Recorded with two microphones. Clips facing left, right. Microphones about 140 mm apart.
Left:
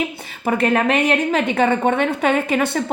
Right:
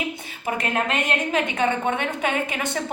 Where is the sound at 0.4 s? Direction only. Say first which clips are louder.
Left 8 dB; 65° left (ahead or behind).